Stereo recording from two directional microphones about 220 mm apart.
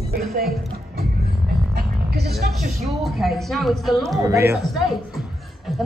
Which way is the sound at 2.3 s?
45° right (ahead or behind).